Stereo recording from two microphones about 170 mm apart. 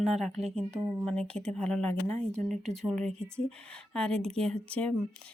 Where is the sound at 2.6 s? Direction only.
Centre (ahead or behind).